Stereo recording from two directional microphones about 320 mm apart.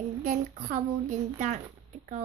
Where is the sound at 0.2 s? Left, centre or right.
Right.